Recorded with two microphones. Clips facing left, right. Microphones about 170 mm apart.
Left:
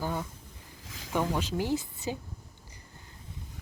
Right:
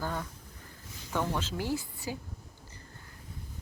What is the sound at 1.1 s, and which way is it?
Speech, 15° left (ahead or behind).